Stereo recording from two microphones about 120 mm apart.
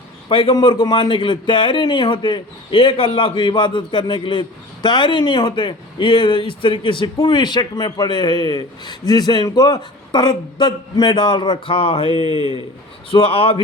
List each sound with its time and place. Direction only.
0.3 s a man's voice: 45° left (ahead or behind)